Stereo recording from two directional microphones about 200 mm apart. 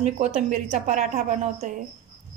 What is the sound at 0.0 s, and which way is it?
A woman's voice, 35° right (ahead or behind).